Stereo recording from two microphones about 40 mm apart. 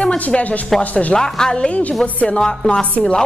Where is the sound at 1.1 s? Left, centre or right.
Centre.